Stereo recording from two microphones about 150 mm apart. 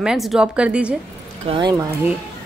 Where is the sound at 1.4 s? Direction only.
35° right (ahead or behind).